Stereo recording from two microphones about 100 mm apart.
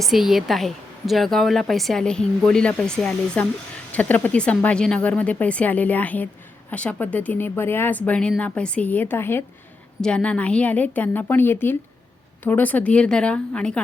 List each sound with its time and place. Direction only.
0.0 s a woman's voice: 5° right (ahead or behind); by 9.4 s 20° left (ahead or behind)
10.0 s speech: 10° left (ahead or behind)